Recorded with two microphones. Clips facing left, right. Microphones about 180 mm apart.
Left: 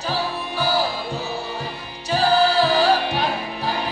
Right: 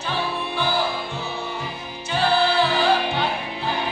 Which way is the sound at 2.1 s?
40° left (ahead or behind).